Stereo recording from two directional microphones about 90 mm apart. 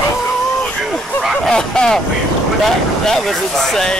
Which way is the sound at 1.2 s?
Centre (ahead or behind).